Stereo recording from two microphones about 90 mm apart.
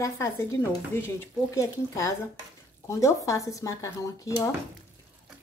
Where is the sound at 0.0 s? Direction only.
30° left (ahead or behind).